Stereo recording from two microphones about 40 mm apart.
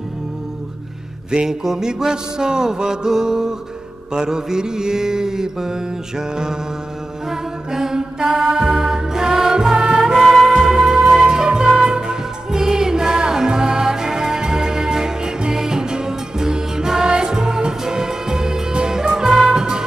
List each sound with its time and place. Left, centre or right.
1.3 s mantra: centre
7.2 s music: centre